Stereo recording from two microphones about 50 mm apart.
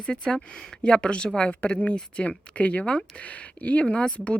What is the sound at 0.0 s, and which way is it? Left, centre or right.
Speech, centre.